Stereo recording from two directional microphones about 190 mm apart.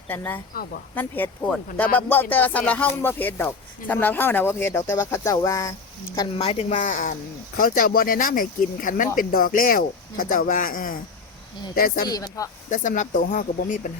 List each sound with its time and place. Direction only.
0.5 s speech: 50° left (ahead or behind)
0.9 s speech: 10° left (ahead or behind)
6.4 s speech: 35° left (ahead or behind); by 12.0 s 50° left (ahead or behind)
12.0 s speech: 20° left (ahead or behind)
12.7 s speech: 40° left (ahead or behind)